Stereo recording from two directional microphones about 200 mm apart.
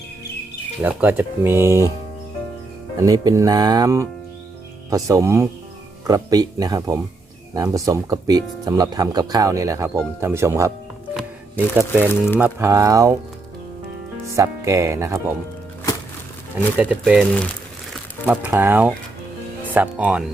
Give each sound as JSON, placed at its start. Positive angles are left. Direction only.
{"t": 0.8, "sound": "speech", "side_deg": -10}
{"t": 2.9, "sound": "speech", "side_deg": -15}
{"t": 11.1, "sound": "music", "side_deg": -5}
{"t": 12.4, "sound": "speech", "side_deg": -10}
{"t": 14.3, "sound": "speech", "side_deg": -15}
{"t": 16.7, "sound": "speech", "side_deg": -5}
{"t": 18.3, "sound": "speech", "side_deg": -10}